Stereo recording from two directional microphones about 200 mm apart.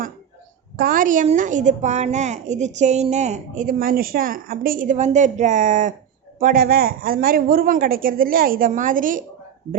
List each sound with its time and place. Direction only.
0.8 s a woman's voice: 45° right (ahead or behind)